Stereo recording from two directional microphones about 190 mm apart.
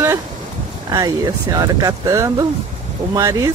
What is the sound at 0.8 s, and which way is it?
Speech, 20° right (ahead or behind).